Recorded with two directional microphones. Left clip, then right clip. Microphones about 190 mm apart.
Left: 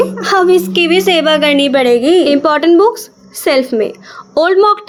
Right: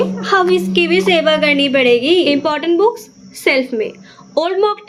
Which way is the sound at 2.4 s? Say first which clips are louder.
Left 5 dB; 30° left (ahead or behind).